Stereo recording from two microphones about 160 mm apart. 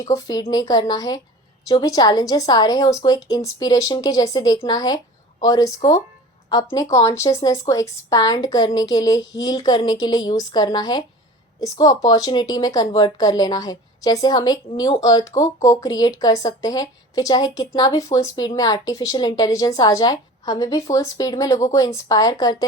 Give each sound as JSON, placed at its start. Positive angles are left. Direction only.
{"t": 0.0, "sound": "speech", "side_deg": 20}